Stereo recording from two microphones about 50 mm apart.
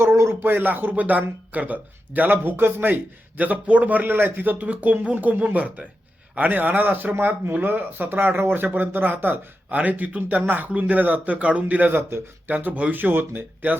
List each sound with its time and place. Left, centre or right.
0.3 s speech: right
4.5 s speech: right
9.6 s speech: right
11.9 s speech: right
12.5 s speech: right